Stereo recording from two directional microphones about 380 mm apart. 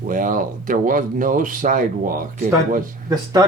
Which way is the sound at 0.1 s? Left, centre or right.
Right.